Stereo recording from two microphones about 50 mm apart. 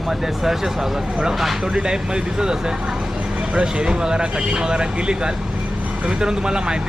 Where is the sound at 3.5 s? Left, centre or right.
Centre.